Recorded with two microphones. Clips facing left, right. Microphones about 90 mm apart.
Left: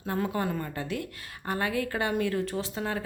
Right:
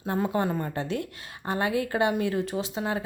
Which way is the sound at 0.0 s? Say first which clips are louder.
Right 3 dB; 25° right (ahead or behind).